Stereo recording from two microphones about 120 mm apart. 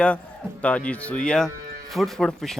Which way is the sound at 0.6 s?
10° left (ahead or behind).